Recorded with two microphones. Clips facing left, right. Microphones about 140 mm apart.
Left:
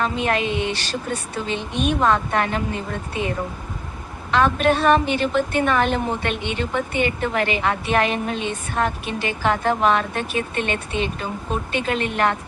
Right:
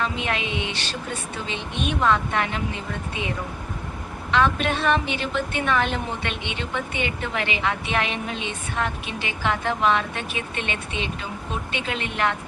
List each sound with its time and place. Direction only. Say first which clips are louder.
0.0 s a woman's voice: left 5 dB; 45° left (ahead or behind)